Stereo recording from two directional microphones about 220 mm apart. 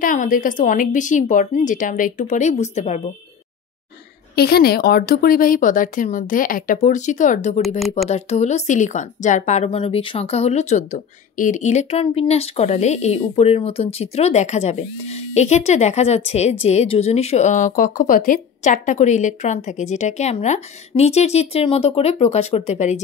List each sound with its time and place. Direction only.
0.0 s speech: 40° left (ahead or behind)
4.4 s a woman's voice: 45° left (ahead or behind)